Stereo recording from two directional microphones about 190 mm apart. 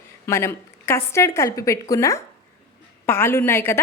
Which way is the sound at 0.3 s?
15° left (ahead or behind).